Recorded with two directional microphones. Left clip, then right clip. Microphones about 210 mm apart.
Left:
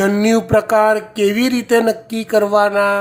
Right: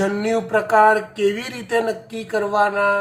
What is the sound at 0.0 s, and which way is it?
Speech, 60° left (ahead or behind).